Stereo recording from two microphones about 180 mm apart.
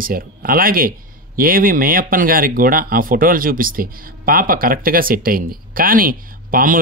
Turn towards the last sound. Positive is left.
turn(degrees=-50)  # may be behind; listen again after turning